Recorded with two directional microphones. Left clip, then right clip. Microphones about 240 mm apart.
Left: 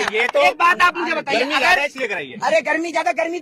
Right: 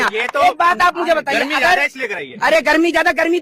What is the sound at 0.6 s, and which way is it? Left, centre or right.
Speech, right.